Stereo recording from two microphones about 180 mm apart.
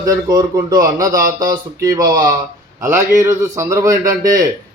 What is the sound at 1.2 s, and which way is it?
Speech, 50° right (ahead or behind).